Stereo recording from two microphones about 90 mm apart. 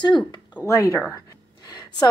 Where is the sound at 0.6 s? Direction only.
35° left (ahead or behind).